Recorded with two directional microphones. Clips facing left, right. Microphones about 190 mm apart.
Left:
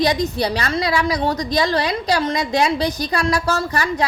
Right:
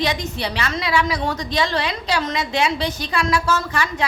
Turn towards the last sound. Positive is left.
turn(degrees=40)  # may be behind; listen again after turning